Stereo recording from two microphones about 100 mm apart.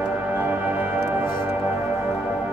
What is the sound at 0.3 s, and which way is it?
Music, 20° right (ahead or behind).